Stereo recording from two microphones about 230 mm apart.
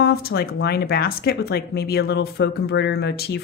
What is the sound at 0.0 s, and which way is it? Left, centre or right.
A woman's voice, left.